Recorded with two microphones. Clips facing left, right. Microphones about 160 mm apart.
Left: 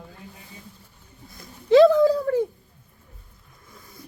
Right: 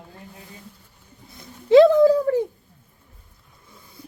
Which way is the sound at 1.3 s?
20° right (ahead or behind).